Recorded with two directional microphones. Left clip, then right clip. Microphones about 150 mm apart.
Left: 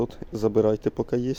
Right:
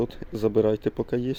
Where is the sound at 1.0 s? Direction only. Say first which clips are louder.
Left 1 dB; centre (ahead or behind).